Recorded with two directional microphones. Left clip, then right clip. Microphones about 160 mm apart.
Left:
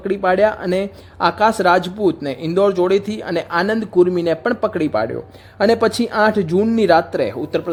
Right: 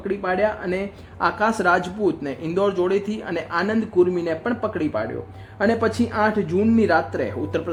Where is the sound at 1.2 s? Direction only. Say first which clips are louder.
Left 5 dB; 20° left (ahead or behind).